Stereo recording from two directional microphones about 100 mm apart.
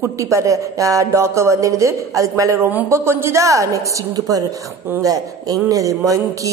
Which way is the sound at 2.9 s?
25° right (ahead or behind).